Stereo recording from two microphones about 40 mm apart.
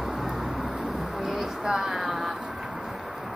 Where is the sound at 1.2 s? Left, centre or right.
Centre.